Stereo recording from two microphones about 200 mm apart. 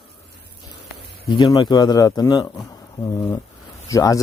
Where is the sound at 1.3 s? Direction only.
20° left (ahead or behind).